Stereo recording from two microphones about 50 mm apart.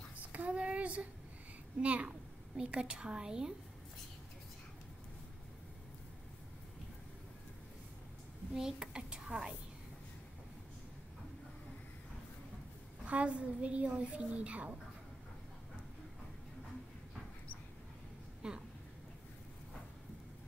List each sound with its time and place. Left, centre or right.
0.3 s a sound: right
1.8 s a woman's voice: right
8.5 s speech: centre
13.0 s a woman's voice: right
18.4 s a woman's voice: centre